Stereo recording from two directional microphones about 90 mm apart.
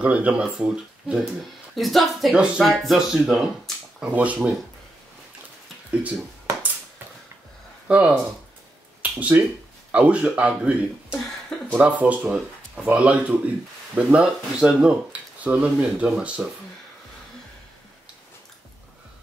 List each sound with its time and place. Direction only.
0.0 s speech: 15° right (ahead or behind)
1.8 s speech: centre (ahead or behind)
2.3 s speech: 10° right (ahead or behind)
4.1 s speech: 15° right (ahead or behind)
7.9 s speech: 15° right (ahead or behind)